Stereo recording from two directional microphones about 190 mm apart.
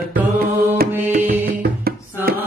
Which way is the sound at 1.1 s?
50° right (ahead or behind).